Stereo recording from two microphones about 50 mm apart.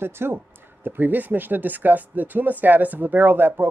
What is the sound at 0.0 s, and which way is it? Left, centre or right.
Speech, right.